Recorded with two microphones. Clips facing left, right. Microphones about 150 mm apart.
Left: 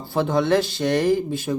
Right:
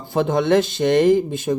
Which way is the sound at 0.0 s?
20° right (ahead or behind).